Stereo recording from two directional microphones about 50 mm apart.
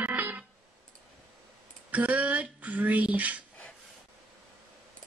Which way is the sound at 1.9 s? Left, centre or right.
Right.